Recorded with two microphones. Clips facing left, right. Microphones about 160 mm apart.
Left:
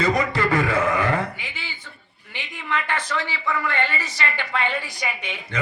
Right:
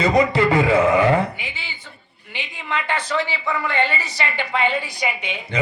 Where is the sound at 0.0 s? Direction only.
15° right (ahead or behind).